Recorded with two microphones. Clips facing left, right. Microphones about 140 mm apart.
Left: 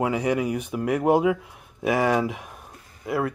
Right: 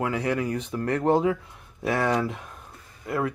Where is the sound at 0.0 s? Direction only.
15° left (ahead or behind).